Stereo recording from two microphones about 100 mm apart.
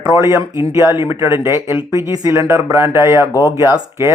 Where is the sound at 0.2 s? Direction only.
30° right (ahead or behind).